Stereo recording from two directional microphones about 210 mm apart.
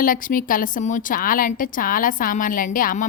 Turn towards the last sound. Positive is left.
turn(degrees=40)  # may be behind; listen again after turning